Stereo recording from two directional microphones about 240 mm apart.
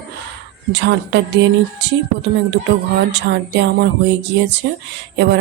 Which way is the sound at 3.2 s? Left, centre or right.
Right.